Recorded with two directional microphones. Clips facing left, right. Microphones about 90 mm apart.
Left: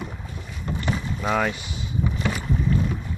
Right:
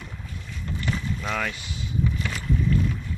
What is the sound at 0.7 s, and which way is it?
Rowboat, 20° left (ahead or behind).